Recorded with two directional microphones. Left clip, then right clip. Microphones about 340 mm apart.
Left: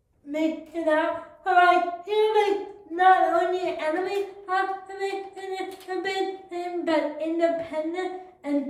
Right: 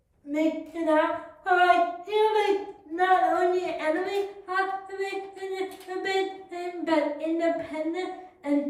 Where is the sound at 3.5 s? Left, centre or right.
Centre.